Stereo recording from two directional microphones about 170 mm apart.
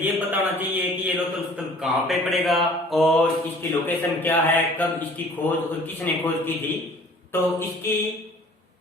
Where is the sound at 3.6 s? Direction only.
10° left (ahead or behind).